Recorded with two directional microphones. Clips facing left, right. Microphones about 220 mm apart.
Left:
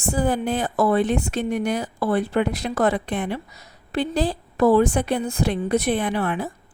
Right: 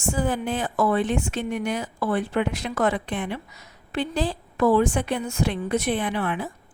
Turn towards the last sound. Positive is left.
turn(degrees=40)  # may be behind; listen again after turning